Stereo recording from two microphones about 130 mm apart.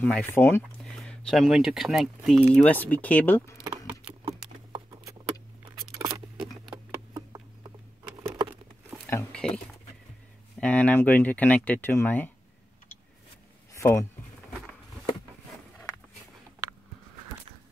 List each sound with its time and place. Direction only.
0.0 s speech: 15° left (ahead or behind)
0.7 s speech: 5° left (ahead or behind)
2.5 s speech: 10° left (ahead or behind)
5.8 s scissors: 30° right (ahead or behind)
7.2 s patter: 30° right (ahead or behind)
9.0 s a sound: 10° left (ahead or behind)
10.6 s speech: 10° left (ahead or behind)
13.7 s speech: 25° left (ahead or behind)